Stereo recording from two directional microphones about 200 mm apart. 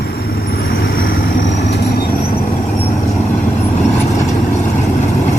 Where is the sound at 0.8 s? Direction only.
50° left (ahead or behind).